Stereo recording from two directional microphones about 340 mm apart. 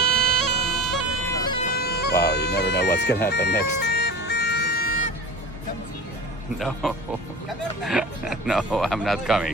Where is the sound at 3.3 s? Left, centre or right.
Left.